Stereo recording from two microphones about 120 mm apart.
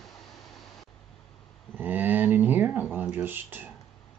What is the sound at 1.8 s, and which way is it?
Speech, 15° right (ahead or behind).